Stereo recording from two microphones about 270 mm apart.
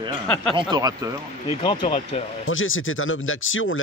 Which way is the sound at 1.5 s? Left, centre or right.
Centre.